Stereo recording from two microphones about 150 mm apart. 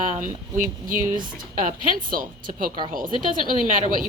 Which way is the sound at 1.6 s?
65° right (ahead or behind).